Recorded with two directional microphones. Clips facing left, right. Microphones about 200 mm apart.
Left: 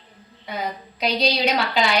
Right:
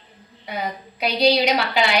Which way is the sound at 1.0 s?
10° right (ahead or behind).